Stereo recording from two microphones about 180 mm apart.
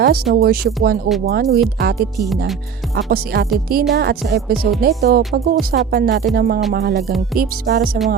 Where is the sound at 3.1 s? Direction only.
60° right (ahead or behind).